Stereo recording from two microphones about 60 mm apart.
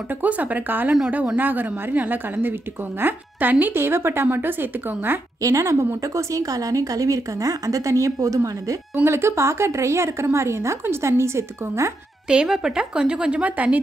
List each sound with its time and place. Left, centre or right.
0.1 s a woman's voice: right
3.7 s a woman's voice: right
5.4 s speech: right
6.1 s a woman's voice: right
9.0 s a woman's voice: right
12.3 s a woman's voice: centre